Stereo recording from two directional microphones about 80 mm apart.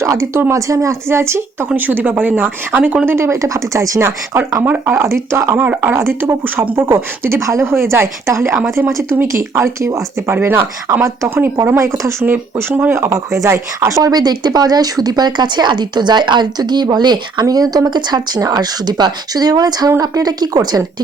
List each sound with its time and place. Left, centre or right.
0.0 s speech: right
3.1 s a woman's voice: right
5.5 s speech: right
5.9 s a woman's voice: right
10.3 s a woman's voice: right
13.0 s speech: right
17.4 s speech: right